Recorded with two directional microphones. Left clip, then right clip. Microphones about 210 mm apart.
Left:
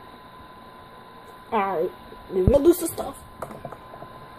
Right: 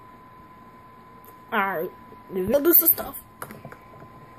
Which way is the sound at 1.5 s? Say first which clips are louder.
Left 1 dB; 30° right (ahead or behind).